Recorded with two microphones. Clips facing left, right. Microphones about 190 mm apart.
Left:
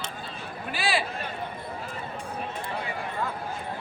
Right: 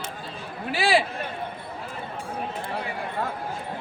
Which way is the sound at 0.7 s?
90° right.